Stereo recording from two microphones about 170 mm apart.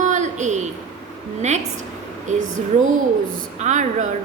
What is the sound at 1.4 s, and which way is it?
Speech, 45° right (ahead or behind).